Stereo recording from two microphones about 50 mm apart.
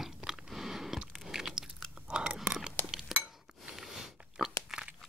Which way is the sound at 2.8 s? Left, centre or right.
Left.